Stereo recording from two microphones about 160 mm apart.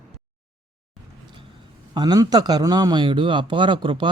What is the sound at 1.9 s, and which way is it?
A man's voice, 25° right (ahead or behind).